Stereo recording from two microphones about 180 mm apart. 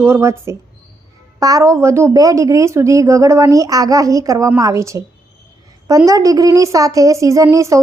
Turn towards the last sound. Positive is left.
turn(degrees=-15)  # may be behind; listen again after turning